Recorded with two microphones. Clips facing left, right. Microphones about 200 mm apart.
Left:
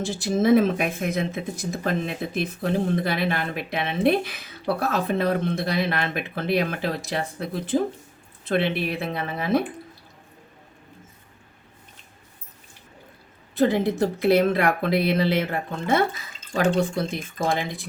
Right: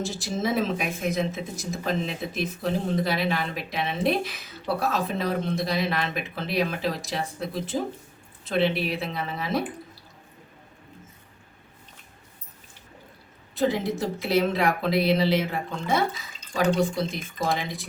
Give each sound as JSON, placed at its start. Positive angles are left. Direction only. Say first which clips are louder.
{"t": 0.2, "sound": "speech", "louder": "left 9 dB", "side_deg": 55}
{"t": 13.6, "sound": "speech", "louder": "left 4 dB", "side_deg": 60}